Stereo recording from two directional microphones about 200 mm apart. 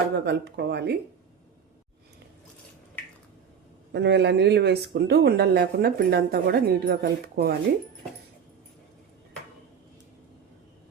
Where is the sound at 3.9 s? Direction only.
60° right (ahead or behind).